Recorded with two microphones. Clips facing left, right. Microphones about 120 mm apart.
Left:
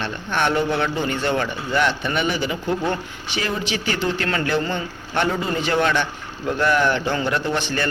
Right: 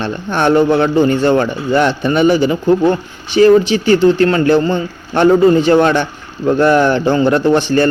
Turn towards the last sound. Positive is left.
turn(degrees=-35)  # may be behind; listen again after turning